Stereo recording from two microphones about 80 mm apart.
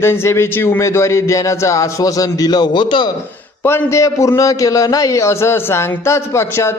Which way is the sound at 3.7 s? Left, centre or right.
Left.